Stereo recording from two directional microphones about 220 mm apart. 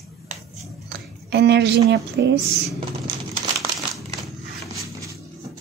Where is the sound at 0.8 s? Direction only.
50° right (ahead or behind).